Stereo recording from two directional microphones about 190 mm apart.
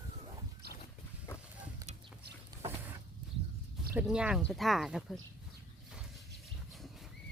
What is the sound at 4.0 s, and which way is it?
Speech, 5° right (ahead or behind).